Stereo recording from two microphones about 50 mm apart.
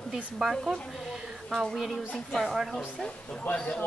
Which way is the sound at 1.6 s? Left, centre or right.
Centre.